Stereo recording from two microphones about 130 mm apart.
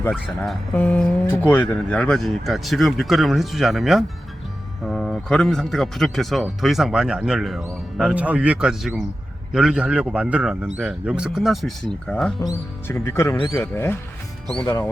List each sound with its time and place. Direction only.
0.1 s a man's voice: centre (ahead or behind)
0.8 s a man's voice: 10° left (ahead or behind)
12.4 s speech: 25° left (ahead or behind)